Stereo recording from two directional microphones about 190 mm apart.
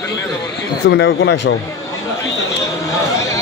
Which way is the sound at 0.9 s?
75° left (ahead or behind).